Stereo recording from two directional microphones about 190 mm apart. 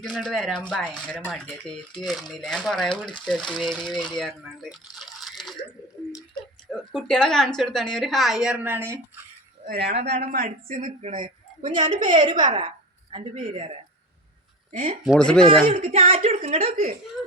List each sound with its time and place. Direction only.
0.0 s speech: 5° left (ahead or behind)
6.7 s speech: 5° left (ahead or behind)
9.6 s speech: 55° right (ahead or behind)
10.7 s speech: 35° right (ahead or behind)
11.7 s a woman's voice: 25° right (ahead or behind)
15.0 s speech: centre (ahead or behind)
15.7 s speech: 30° right (ahead or behind)